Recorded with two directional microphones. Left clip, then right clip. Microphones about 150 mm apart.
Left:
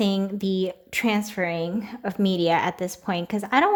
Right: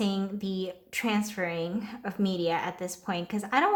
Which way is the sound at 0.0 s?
35° left (ahead or behind).